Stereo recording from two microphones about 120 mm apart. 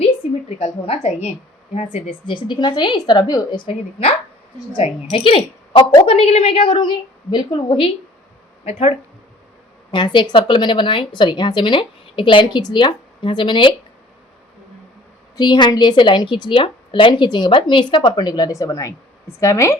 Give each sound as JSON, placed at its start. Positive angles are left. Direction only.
{"t": 0.0, "sound": "a sound", "side_deg": 60}
{"t": 1.7, "sound": "speech", "side_deg": 65}
{"t": 5.1, "sound": "a woman's voice", "side_deg": 50}
{"t": 9.9, "sound": "speech", "side_deg": 40}
{"t": 15.4, "sound": "a woman's voice", "side_deg": 35}